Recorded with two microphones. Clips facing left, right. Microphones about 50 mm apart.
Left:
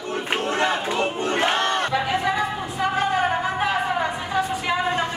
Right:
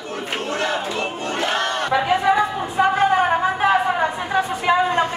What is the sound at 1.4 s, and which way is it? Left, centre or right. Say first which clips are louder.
Battle cry: even; left.